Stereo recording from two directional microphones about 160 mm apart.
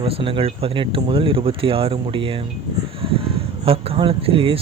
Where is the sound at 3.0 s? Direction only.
35° right (ahead or behind).